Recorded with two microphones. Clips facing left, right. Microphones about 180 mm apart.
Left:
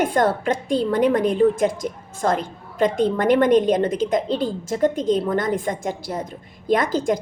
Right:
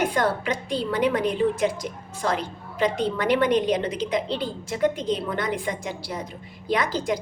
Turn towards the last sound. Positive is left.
turn(degrees=50)  # may be behind; listen again after turning